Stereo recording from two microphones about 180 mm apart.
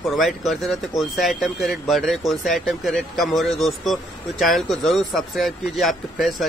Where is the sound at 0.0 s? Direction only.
Centre (ahead or behind).